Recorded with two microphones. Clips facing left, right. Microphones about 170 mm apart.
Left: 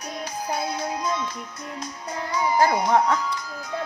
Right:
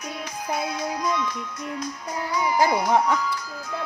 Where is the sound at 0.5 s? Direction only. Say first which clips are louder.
Right 1 dB; 30° left (ahead or behind).